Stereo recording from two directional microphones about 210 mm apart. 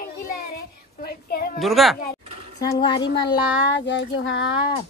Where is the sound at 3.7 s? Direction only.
55° left (ahead or behind).